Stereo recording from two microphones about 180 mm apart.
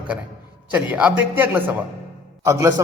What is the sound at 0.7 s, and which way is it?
A man's voice, 5° right (ahead or behind).